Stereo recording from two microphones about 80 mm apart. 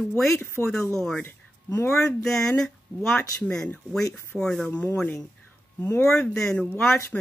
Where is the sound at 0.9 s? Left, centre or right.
Centre.